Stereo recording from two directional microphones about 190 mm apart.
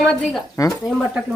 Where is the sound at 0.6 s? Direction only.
20° left (ahead or behind).